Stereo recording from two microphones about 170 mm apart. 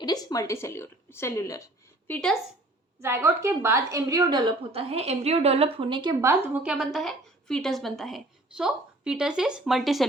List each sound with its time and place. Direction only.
0.0 s a woman's voice: 25° left (ahead or behind); by 2.4 s 5° left (ahead or behind)
3.0 s a woman's voice: 15° right (ahead or behind)
6.2 s a woman's voice: 10° right (ahead or behind)